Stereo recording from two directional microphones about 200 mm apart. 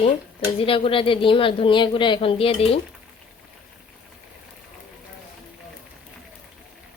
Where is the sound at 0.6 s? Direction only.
25° left (ahead or behind).